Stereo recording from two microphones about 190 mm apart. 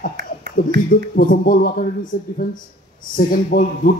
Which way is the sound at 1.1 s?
50° left (ahead or behind).